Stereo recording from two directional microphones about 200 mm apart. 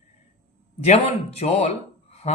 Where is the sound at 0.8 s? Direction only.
30° left (ahead or behind).